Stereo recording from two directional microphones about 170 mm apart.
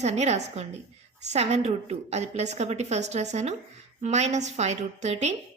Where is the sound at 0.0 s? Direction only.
40° right (ahead or behind).